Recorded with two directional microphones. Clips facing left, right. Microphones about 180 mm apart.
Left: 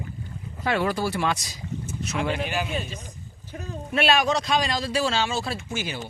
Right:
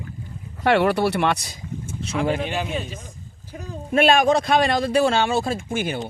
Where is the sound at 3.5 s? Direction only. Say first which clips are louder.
Right 1 dB; 10° right (ahead or behind).